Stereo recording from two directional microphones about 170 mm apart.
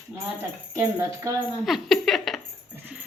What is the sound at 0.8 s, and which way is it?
Speech, 15° right (ahead or behind).